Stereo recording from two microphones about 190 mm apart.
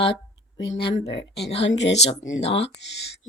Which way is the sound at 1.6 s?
70° left (ahead or behind).